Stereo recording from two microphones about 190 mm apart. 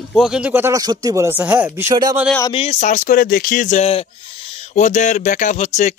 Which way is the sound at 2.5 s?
30° left (ahead or behind).